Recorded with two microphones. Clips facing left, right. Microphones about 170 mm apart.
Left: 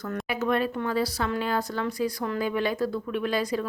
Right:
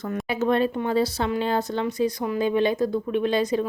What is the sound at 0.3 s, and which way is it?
Speech, 25° right (ahead or behind).